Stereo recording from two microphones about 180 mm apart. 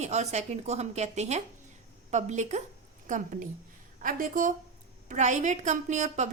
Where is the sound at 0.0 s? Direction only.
40° right (ahead or behind).